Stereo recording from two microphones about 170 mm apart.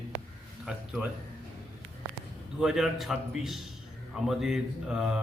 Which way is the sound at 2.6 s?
5° right (ahead or behind).